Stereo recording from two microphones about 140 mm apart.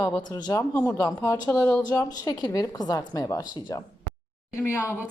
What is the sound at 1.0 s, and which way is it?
A woman's voice, 20° left (ahead or behind).